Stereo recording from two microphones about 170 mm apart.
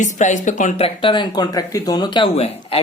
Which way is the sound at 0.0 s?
45° left (ahead or behind).